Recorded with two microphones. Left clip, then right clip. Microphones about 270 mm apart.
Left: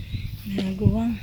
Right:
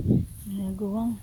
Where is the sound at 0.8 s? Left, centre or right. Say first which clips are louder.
Left 4 dB; right.